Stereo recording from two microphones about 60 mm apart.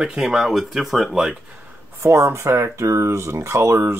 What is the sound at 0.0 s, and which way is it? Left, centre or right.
Speech, centre.